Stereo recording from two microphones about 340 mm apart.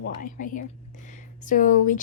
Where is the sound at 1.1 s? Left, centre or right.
Left.